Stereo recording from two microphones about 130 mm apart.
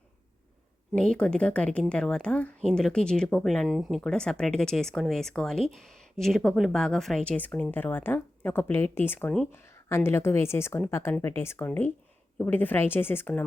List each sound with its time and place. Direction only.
0.9 s a woman's voice: 5° left (ahead or behind)